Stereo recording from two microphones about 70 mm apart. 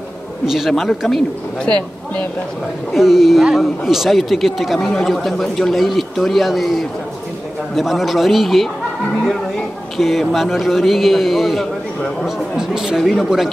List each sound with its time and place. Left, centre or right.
0.5 s speech: centre
1.7 s speech: centre
2.9 s speech: centre
9.1 s a sound: centre
9.9 s speech: centre